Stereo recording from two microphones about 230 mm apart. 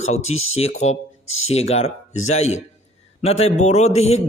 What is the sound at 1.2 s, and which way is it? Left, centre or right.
Speech, left.